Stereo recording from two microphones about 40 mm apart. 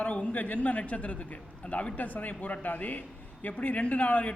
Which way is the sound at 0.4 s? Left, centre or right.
Left.